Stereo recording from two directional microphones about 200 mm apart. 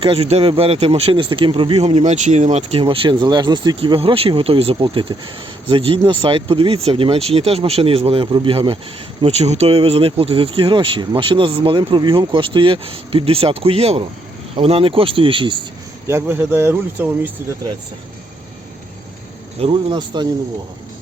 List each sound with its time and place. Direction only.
0.0 s speech: 30° right (ahead or behind)
16.0 s speech: 10° right (ahead or behind)
19.5 s speech: 25° right (ahead or behind)